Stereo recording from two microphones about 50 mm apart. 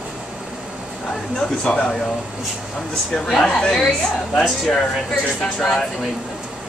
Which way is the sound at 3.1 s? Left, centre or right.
Centre.